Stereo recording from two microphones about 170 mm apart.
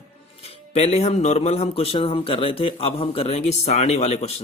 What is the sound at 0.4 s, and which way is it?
Speech, 35° left (ahead or behind).